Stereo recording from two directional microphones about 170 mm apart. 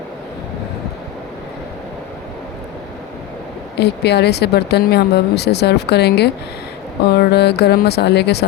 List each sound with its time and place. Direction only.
3.8 s speech: 80° left